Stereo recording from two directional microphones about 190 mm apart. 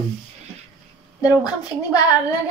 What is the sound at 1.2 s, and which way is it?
Speech, 20° left (ahead or behind).